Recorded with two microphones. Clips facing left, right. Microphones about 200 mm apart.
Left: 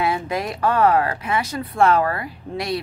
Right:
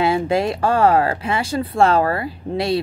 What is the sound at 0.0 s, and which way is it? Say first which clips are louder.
Speech: right 5 dB; 30° right (ahead or behind).